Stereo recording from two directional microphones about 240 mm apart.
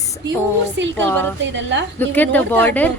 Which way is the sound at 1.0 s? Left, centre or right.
Centre.